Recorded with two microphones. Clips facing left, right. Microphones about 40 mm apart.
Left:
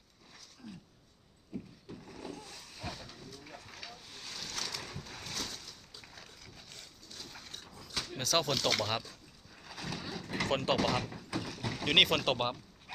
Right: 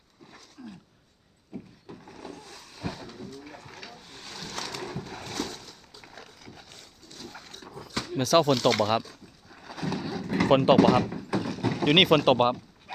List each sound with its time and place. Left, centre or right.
0.6 s dog: centre
1.5 s vehicle: centre
4.5 s a sound: centre
6.4 s a sound: right
6.7 s pig: centre
7.6 s dog: centre
8.1 s speech: centre
9.7 s horse: centre
10.2 s a sound: right
11.6 s speech: centre